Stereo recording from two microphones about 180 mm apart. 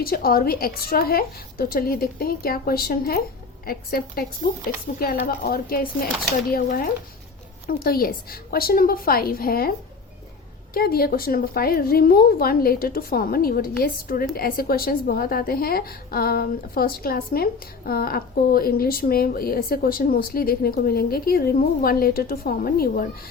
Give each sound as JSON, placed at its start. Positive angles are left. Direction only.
{"t": 0.0, "sound": "a woman's voice", "side_deg": 55}
{"t": 7.7, "sound": "a woman's voice", "side_deg": 55}
{"t": 10.8, "sound": "a woman's voice", "side_deg": 55}